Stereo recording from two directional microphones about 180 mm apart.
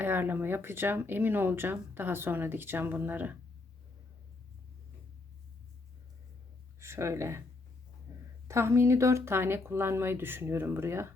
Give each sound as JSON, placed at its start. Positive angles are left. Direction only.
{"t": 0.0, "sound": "speech", "side_deg": -10}
{"t": 6.7, "sound": "speech", "side_deg": -15}
{"t": 8.1, "sound": "a sound", "side_deg": -15}
{"t": 8.4, "sound": "speech", "side_deg": -15}